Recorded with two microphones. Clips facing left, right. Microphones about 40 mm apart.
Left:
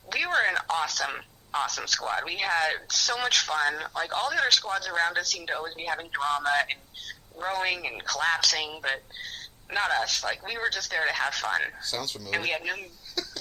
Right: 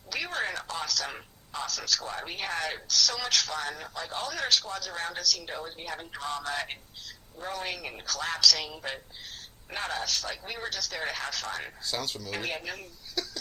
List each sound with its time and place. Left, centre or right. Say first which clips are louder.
0.1 s speech: left 7 dB; left
11.8 s speech: even; centre
12.5 s speech: left 6 dB; left
13.2 s a sound: even; centre